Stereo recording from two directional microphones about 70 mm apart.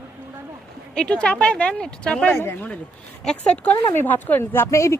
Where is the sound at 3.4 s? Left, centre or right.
Left.